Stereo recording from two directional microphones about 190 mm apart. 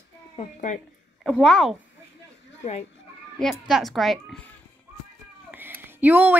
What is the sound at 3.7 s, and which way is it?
Speech, centre (ahead or behind).